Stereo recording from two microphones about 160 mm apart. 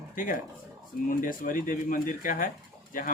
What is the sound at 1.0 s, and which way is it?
Speech, 55° left (ahead or behind).